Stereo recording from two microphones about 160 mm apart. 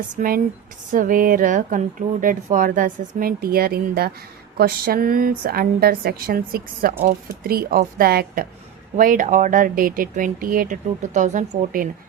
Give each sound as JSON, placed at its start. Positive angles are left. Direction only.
{"t": 0.2, "sound": "a woman's voice", "side_deg": -60}
{"t": 9.0, "sound": "speech", "side_deg": -60}